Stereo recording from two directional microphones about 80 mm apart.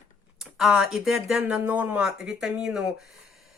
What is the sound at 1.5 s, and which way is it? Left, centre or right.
Speech, centre.